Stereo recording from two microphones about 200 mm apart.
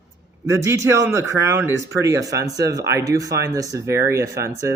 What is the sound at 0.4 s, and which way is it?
Speech, 15° right (ahead or behind).